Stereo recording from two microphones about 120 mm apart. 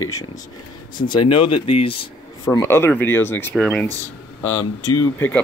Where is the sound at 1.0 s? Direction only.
45° left (ahead or behind).